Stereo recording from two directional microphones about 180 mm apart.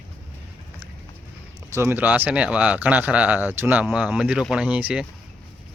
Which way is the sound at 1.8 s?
10° right (ahead or behind).